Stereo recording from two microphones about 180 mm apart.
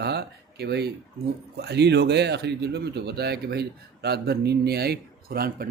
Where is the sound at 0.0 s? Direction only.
65° right (ahead or behind).